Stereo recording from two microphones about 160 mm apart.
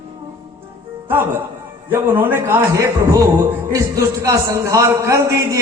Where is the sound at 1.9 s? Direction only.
10° right (ahead or behind).